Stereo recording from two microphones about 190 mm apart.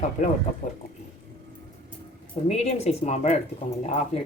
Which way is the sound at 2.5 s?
35° left (ahead or behind).